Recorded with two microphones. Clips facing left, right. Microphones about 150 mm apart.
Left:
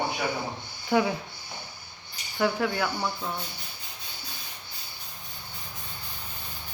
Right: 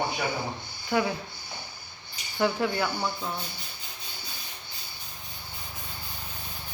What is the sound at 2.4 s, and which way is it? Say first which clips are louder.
Speech: even; centre (ahead or behind).